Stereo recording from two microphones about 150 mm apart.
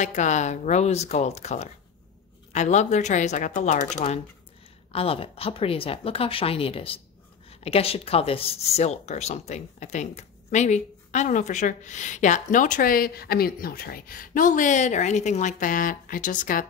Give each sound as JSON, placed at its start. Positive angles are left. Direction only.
{"t": 0.0, "sound": "speech", "side_deg": 55}
{"t": 4.9, "sound": "a woman's voice", "side_deg": 40}